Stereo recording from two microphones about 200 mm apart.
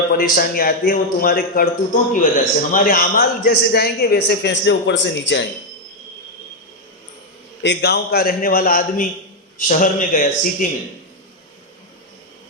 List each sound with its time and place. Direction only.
0.1 s a man's voice: 45° left (ahead or behind); by 5.5 s 60° left (ahead or behind)
7.6 s a man's voice: 60° left (ahead or behind); by 10.7 s 40° left (ahead or behind)